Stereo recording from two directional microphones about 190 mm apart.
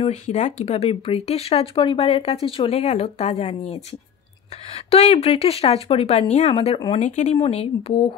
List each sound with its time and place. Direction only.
0.0 s speech: 35° left (ahead or behind)
4.9 s speech: 30° left (ahead or behind)
7.0 s speech: 40° left (ahead or behind)